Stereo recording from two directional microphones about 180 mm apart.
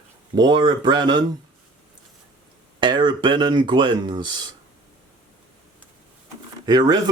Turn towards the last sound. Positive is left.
turn(degrees=-25)  # may be behind; listen again after turning